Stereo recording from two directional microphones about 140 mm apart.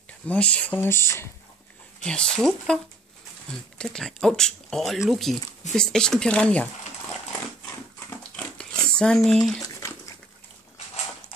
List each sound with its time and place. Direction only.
0.3 s speech: 10° left (ahead or behind)
2.0 s speech: 5° left (ahead or behind)
8.5 s a sound: 5° left (ahead or behind)
9.6 s dog: 20° left (ahead or behind)